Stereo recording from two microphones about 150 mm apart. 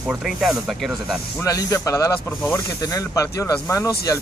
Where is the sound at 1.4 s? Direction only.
20° left (ahead or behind).